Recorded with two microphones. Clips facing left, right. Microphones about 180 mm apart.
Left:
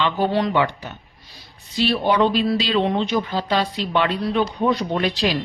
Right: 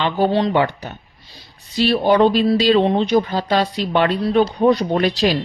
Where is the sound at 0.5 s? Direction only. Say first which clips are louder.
Right 3 dB; 40° right (ahead or behind).